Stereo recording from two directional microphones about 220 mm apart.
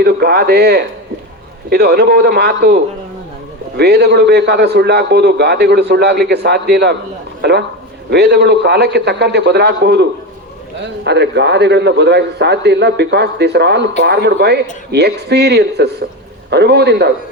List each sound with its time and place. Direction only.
0.0 s a man's voice: 45° right (ahead or behind)